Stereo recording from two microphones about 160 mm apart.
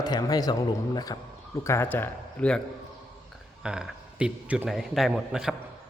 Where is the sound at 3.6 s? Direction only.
5° right (ahead or behind).